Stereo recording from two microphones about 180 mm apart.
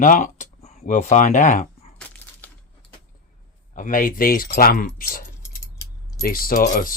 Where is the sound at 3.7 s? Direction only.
45° left (ahead or behind).